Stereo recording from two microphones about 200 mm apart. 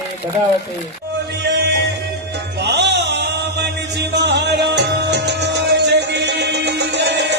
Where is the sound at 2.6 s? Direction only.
60° right (ahead or behind).